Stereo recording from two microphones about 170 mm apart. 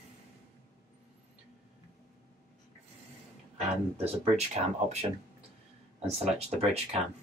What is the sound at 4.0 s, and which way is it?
Speech, 35° right (ahead or behind).